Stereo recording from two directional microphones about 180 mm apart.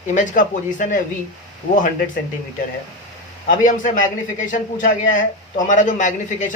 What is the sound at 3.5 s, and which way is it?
A man's voice, 45° left (ahead or behind).